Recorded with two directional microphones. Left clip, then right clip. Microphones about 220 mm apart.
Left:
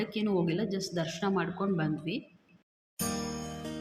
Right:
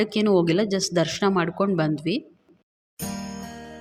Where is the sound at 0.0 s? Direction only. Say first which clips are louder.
Right 11 dB; 45° right (ahead or behind).